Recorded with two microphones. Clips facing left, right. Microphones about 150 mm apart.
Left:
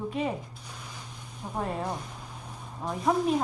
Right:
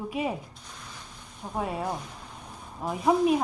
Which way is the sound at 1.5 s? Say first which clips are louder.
Right 1 dB; 5° right (ahead or behind).